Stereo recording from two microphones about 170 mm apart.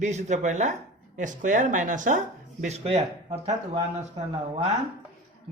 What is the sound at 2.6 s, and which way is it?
Speech, 40° right (ahead or behind).